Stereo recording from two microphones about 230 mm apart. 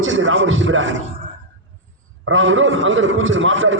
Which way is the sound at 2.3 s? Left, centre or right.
Right.